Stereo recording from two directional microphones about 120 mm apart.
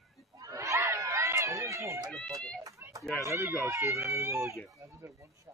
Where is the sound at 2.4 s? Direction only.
Centre (ahead or behind).